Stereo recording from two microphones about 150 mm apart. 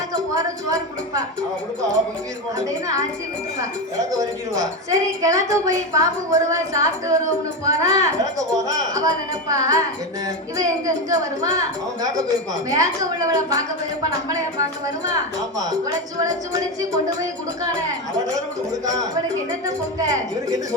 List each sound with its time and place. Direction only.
0.3 s a woman's voice: 25° right (ahead or behind)
2.6 s a woman's voice: 20° right (ahead or behind)
4.2 s a woman's voice: 25° right (ahead or behind)
12.7 s a woman's voice: 25° right (ahead or behind)
15.0 s a woman's voice: 25° right (ahead or behind)
18.7 s a woman's voice: 25° right (ahead or behind)